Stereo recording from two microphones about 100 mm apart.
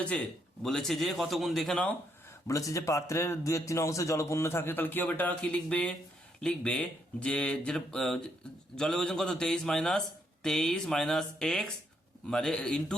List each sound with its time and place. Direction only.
0.6 s a man's voice: 5° left (ahead or behind)
2.5 s a man's voice: 35° left (ahead or behind); by 13.0 s 10° left (ahead or behind)